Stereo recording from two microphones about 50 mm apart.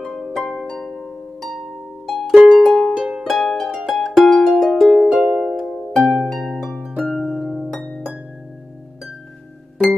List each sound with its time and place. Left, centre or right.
0.0 s harp: centre
2.0 s music: centre
2.3 s music: centre
2.7 s music: centre
5.9 s harp: centre